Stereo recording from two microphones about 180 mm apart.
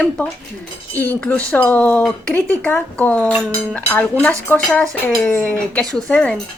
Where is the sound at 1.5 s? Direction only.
10° left (ahead or behind).